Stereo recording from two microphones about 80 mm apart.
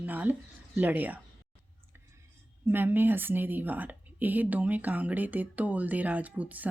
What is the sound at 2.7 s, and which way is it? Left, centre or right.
A woman's voice, right.